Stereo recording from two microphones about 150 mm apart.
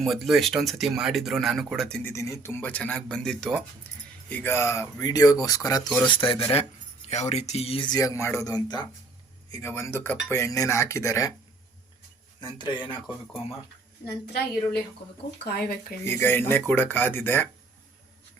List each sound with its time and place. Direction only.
0.0 s speech: centre (ahead or behind)
2.0 s speech: 20° left (ahead or behind); by 7.9 s 40° left (ahead or behind)
7.9 s speech: 20° left (ahead or behind)
12.5 s speech: 30° left (ahead or behind)
15.4 s speech: 90° left
16.0 s speech: 15° left (ahead or behind)